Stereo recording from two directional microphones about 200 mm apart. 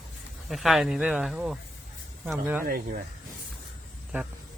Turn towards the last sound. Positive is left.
turn(degrees=-45)  # may be behind; listen again after turning